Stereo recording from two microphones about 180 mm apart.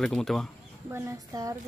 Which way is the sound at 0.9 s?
20° right (ahead or behind).